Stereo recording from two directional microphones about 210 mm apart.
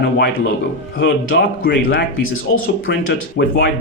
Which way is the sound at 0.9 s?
60° left (ahead or behind).